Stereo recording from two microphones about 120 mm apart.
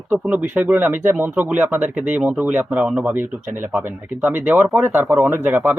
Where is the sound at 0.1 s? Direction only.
15° right (ahead or behind).